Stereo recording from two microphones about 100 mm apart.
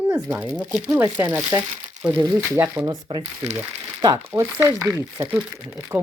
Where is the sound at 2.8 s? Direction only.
45° right (ahead or behind).